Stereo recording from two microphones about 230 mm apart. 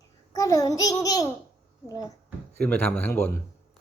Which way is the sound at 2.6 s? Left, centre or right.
Centre.